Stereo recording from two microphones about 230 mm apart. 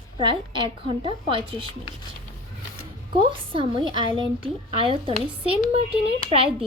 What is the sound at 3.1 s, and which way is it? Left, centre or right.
A woman's voice, right.